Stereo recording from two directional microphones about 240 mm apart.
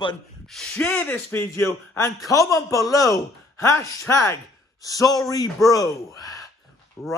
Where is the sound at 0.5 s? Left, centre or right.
Centre.